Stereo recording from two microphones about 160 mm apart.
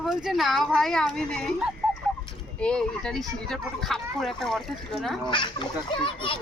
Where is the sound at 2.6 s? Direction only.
5° left (ahead or behind).